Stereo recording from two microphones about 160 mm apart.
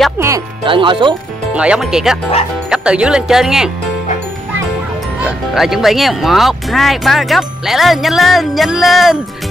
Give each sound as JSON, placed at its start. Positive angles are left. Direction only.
{"t": 0.7, "sound": "speech", "side_deg": -30}
{"t": 1.5, "sound": "speech", "side_deg": -5}
{"t": 5.2, "sound": "speech", "side_deg": -5}